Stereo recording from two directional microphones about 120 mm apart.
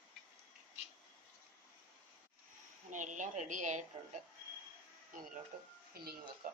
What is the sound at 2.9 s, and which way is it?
Speech, 90° right.